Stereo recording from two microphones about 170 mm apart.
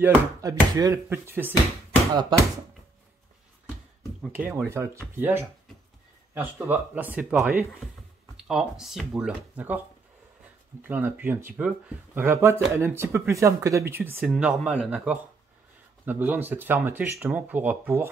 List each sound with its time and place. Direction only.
0.0 s speech: 20° right (ahead or behind)
4.2 s speech: 10° right (ahead or behind)
10.8 s speech: 10° right (ahead or behind)